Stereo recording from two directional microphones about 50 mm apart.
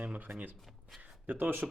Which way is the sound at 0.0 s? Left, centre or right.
Right.